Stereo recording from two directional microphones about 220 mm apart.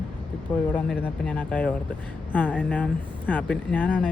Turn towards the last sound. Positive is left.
turn(degrees=5)  # may be behind; listen again after turning